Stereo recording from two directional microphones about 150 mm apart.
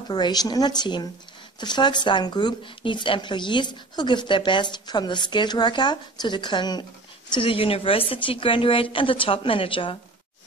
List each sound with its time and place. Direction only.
0.1 s speech: 30° left (ahead or behind)